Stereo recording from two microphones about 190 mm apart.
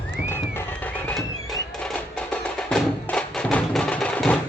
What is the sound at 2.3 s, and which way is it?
Music, 5° left (ahead or behind).